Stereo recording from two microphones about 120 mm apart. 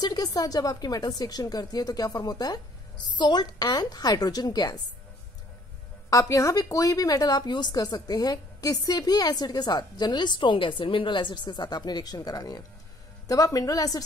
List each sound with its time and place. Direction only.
0.0 s a woman's voice: 30° left (ahead or behind)
6.0 s a woman's voice: 25° left (ahead or behind)